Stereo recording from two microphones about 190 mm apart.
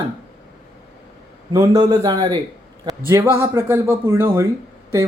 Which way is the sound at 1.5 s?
20° right (ahead or behind).